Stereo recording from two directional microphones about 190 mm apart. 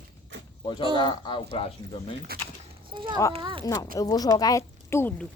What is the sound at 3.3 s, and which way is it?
Speech, 25° right (ahead or behind).